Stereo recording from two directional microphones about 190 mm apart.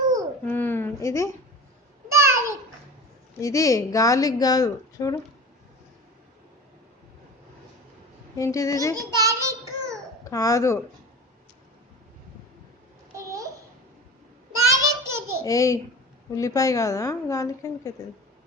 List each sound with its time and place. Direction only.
0.4 s a sound: 10° left (ahead or behind)
2.0 s a sound: 15° right (ahead or behind)
3.4 s a woman's voice: 15° left (ahead or behind)
8.4 s a woman's voice: 15° left (ahead or behind)
9.0 s child singing: 20° right (ahead or behind)
10.2 s a woman's voice: 15° left (ahead or behind)
13.1 s babbling: 15° right (ahead or behind)
14.5 s child singing: 15° right (ahead or behind)
15.4 s a woman's voice: 15° left (ahead or behind)